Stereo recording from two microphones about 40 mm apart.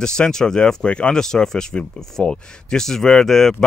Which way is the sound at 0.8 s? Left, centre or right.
Left.